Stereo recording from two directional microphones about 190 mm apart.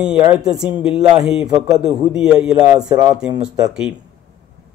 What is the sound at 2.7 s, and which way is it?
Speech, 20° right (ahead or behind).